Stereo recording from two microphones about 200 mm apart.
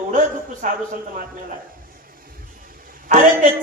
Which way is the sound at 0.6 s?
40° right (ahead or behind).